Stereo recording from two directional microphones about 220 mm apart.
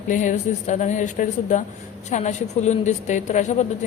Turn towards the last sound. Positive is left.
turn(degrees=30)  # may be behind; listen again after turning